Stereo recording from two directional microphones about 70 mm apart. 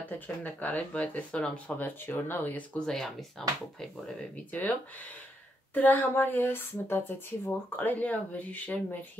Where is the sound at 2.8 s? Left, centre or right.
Centre.